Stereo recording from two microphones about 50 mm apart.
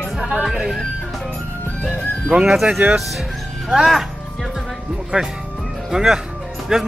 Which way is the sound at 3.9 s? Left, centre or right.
Centre.